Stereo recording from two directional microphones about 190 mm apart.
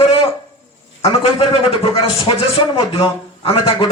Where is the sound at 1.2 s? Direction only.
30° left (ahead or behind).